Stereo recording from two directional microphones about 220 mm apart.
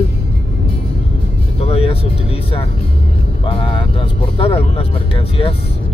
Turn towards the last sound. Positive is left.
turn(degrees=25)  # may be behind; listen again after turning